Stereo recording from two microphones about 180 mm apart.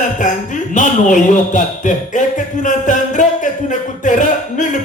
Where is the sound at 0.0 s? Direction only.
45° left (ahead or behind).